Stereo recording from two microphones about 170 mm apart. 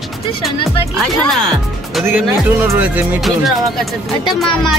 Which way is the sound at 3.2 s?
Centre (ahead or behind).